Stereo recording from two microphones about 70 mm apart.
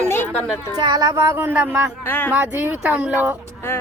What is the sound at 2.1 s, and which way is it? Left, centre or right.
Speech, left.